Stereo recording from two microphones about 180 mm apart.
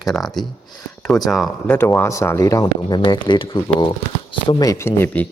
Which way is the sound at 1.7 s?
10° left (ahead or behind).